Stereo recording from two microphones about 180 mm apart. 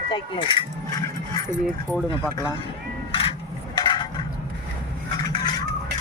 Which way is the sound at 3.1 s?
30° left (ahead or behind).